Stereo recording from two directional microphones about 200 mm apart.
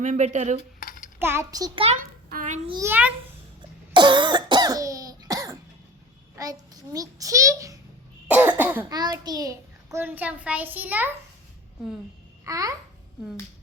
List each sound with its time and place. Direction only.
0.0 s cutlery: 40° right (ahead or behind)
0.8 s a sound: 45° left (ahead or behind)
1.2 s a child's voice: 15° right (ahead or behind)
2.3 s a sound: 40° right (ahead or behind)
2.6 s a child's voice: 20° right (ahead or behind)
3.6 s cough: 25° right (ahead or behind)
6.3 s a child's voice: 20° right (ahead or behind)
8.3 s cough: 10° right (ahead or behind)
8.9 s a child's voice: 20° right (ahead or behind)
12.5 s a child's voice: 15° right (ahead or behind)